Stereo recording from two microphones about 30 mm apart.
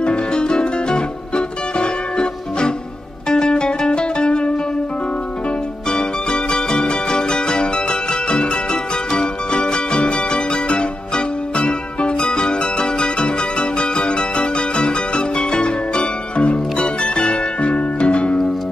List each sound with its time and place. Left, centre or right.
0.0 s music: left
5.9 s music: left